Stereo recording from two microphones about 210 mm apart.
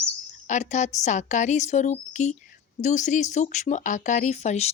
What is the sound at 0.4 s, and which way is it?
A woman's voice, 35° left (ahead or behind).